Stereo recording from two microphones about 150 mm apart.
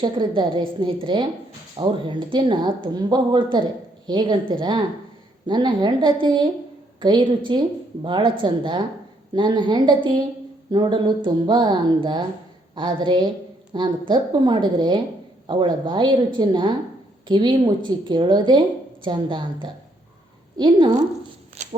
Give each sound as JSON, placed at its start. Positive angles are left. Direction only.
{"t": 0.0, "sound": "a woman's voice", "side_deg": -30}
{"t": 21.6, "sound": "walk", "side_deg": -55}